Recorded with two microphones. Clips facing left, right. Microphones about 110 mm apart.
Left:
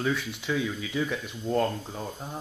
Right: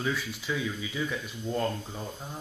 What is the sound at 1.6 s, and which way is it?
Speech, 15° left (ahead or behind).